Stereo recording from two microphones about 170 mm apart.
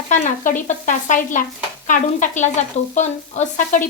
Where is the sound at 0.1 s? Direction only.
50° left (ahead or behind).